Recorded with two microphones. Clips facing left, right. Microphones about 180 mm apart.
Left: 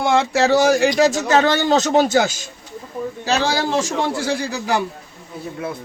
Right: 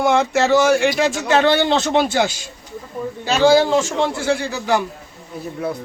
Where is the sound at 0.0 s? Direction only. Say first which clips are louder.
Right 1 dB; 35° left (ahead or behind).